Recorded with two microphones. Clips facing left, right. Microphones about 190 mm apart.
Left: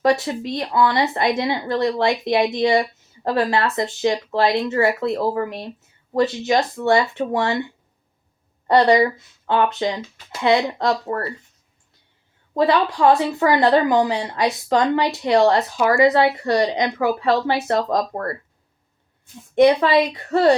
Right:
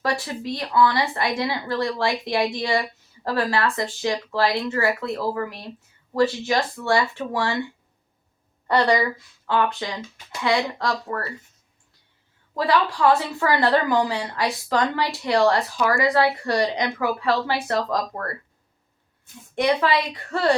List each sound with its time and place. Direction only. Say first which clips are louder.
0.0 s speech: left 7 dB; 20° left (ahead or behind)
8.6 s speech: left 5 dB; 20° left (ahead or behind)
12.5 s speech: left 4 dB; 20° left (ahead or behind)
19.5 s speech: left 7 dB; 25° left (ahead or behind)